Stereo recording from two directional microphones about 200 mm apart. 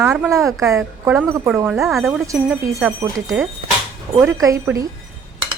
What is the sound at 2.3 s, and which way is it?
Speech, 15° right (ahead or behind).